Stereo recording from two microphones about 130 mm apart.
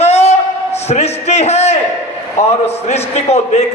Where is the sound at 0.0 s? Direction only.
55° left (ahead or behind).